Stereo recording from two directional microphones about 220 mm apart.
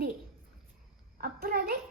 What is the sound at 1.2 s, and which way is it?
Speech, 45° right (ahead or behind).